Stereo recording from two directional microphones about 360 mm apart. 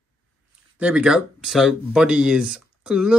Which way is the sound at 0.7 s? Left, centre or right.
Centre.